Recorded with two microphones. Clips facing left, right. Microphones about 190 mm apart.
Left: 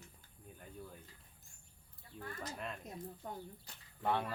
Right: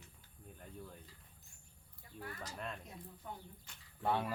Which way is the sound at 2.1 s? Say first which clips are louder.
Even; 45° right (ahead or behind).